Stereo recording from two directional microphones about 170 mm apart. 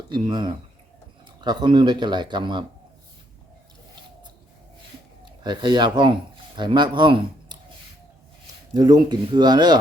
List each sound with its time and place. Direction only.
0.1 s speech: 25° right (ahead or behind)
5.2 s speech: 25° right (ahead or behind)
8.7 s speech: 25° right (ahead or behind)